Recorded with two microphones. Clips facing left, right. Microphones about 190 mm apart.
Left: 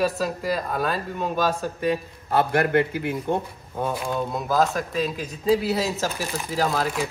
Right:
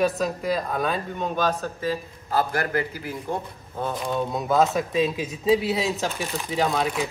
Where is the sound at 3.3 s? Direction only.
25° left (ahead or behind).